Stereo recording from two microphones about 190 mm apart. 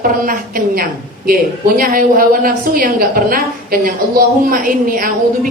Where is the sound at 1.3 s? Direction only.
50° right (ahead or behind).